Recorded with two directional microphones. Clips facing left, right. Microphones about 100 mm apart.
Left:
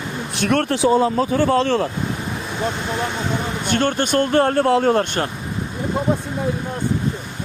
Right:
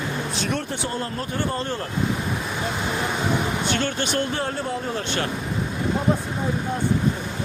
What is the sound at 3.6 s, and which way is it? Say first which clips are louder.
Speech: left 5 dB; 50° left (ahead or behind).